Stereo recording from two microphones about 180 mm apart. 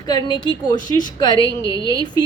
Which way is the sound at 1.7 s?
25° right (ahead or behind).